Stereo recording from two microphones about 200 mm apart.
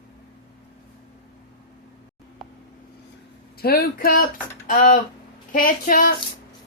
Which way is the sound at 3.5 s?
50° left (ahead or behind).